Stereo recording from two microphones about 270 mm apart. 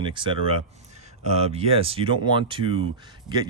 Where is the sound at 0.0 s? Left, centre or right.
Centre.